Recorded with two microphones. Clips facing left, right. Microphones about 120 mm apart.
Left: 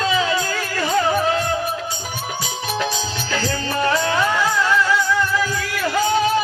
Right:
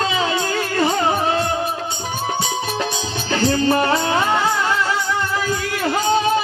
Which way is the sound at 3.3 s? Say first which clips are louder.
Right 8 dB; 25° right (ahead or behind).